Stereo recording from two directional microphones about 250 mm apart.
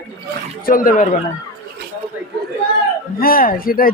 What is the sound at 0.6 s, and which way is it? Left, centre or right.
Speech, left.